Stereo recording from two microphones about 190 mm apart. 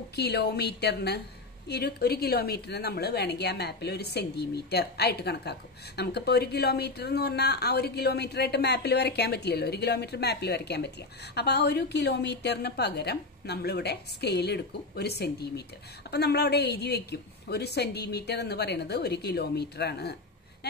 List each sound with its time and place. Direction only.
0.1 s a woman's voice: 60° left (ahead or behind)